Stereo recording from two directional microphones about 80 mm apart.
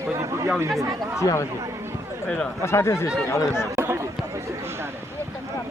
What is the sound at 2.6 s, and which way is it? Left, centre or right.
Speech, left.